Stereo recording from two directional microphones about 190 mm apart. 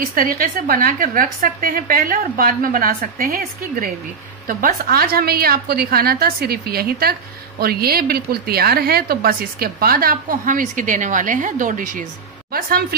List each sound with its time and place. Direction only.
0.0 s a woman's voice: 50° right (ahead or behind)